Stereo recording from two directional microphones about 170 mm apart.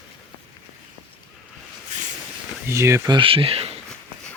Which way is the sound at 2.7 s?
15° right (ahead or behind).